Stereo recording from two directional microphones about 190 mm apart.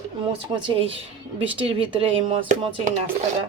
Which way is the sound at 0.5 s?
25° right (ahead or behind).